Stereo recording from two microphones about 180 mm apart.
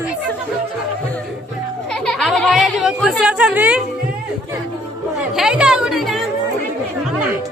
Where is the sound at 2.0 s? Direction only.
Centre (ahead or behind).